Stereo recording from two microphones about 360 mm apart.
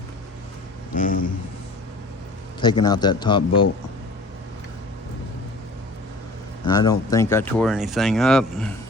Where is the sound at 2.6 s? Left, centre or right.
Centre.